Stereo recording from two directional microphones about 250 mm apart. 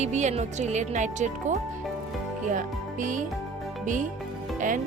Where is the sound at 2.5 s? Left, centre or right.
Right.